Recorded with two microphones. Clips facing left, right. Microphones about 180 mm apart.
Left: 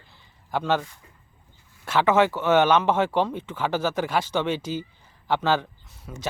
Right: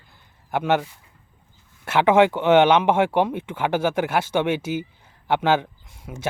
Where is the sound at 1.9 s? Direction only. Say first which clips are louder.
Right 4 dB; 15° right (ahead or behind).